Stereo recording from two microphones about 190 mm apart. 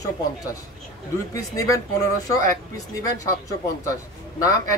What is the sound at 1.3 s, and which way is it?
A man's voice, 15° left (ahead or behind).